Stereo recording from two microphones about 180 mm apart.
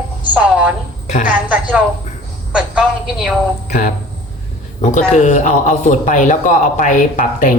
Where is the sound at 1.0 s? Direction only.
40° left (ahead or behind).